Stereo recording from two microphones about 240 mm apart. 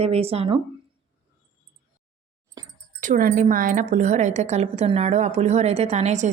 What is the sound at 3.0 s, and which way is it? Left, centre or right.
A woman's voice, right.